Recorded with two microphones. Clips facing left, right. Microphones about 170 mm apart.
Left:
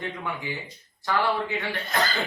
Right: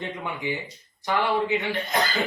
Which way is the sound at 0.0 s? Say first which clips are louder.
Right 2 dB; 20° right (ahead or behind).